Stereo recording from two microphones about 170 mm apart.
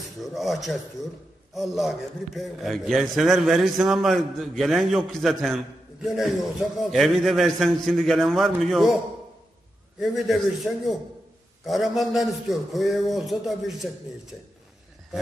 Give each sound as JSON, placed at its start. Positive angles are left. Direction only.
{"t": 0.2, "sound": "a man's voice", "side_deg": 0}